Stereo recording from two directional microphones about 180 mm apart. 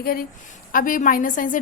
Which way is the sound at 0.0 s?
55° left (ahead or behind).